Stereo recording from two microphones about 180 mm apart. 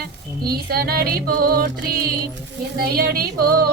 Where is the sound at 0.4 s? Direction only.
60° right (ahead or behind).